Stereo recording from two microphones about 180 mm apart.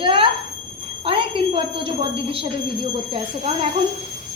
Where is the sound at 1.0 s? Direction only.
30° right (ahead or behind).